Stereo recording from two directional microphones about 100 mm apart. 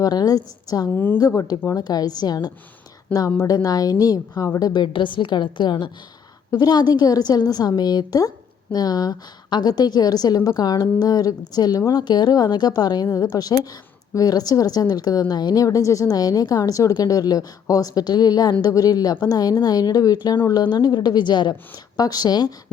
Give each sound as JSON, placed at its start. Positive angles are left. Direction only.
{"t": 0.0, "sound": "a woman's voice", "side_deg": 40}
{"t": 0.9, "sound": "a woman's voice", "side_deg": 20}
{"t": 1.2, "sound": "a woman's voice", "side_deg": 40}